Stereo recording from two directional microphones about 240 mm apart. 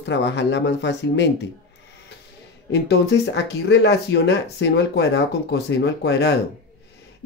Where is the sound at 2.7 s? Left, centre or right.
Left.